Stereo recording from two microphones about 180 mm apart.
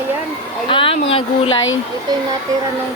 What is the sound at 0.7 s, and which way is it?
Speech, 30° left (ahead or behind).